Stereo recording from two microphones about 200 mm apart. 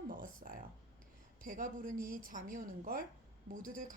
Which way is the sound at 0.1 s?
40° right (ahead or behind).